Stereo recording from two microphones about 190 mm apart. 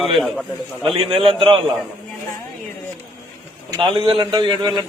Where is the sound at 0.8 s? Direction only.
30° right (ahead or behind).